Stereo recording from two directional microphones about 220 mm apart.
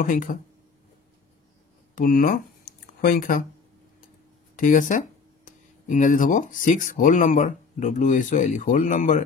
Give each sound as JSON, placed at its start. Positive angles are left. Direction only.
{"t": 0.0, "sound": "speech", "side_deg": 35}
{"t": 2.0, "sound": "speech", "side_deg": 40}
{"t": 4.6, "sound": "speech", "side_deg": 35}